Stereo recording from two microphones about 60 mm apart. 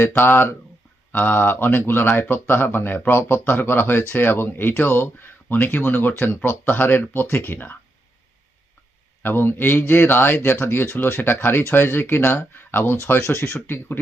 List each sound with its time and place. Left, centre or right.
0.0 s speech: left
9.2 s speech: left